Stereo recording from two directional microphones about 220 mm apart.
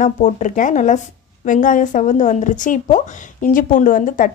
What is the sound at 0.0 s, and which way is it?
A woman's voice, 35° left (ahead or behind).